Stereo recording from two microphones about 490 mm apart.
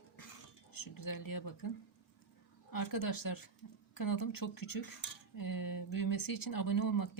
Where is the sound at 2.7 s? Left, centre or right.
Left.